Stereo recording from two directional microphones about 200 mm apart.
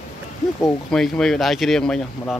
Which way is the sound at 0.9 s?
5° left (ahead or behind).